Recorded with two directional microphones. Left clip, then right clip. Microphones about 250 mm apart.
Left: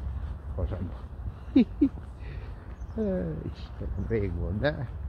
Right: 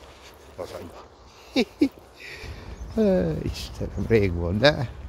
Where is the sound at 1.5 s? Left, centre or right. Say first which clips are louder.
Right 1 dB; right.